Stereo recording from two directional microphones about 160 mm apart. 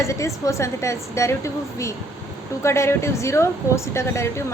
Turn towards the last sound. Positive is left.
turn(degrees=15)  # may be behind; listen again after turning